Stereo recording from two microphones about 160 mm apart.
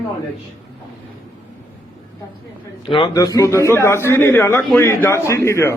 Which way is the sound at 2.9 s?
35° left (ahead or behind).